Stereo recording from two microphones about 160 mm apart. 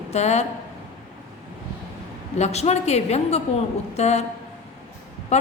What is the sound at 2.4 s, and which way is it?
A woman's voice, 45° left (ahead or behind).